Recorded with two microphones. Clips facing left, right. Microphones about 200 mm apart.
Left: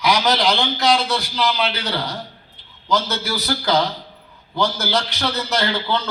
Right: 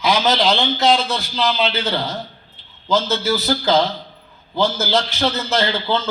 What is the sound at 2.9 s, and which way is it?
A man's voice, 20° right (ahead or behind).